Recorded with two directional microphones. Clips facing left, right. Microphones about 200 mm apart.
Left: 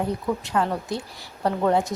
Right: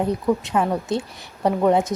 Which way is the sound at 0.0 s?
20° right (ahead or behind).